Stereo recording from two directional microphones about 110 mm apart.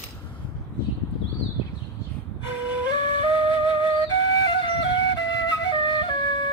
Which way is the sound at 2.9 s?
45° left (ahead or behind).